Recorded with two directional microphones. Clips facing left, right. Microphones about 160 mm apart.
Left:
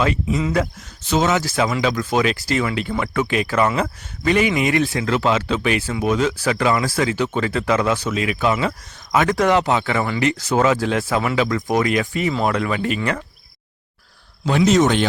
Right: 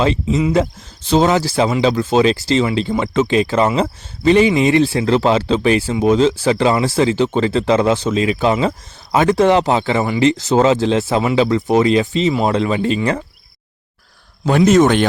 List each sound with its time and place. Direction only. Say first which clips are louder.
0.0 s speech: right 4 dB; 25° right (ahead or behind)
14.4 s speech: right 4 dB; 50° right (ahead or behind)